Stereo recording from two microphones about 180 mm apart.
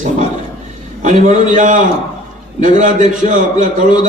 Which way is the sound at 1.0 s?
45° right (ahead or behind).